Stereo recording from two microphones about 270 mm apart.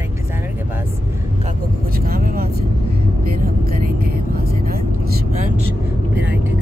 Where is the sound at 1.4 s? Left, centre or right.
Right.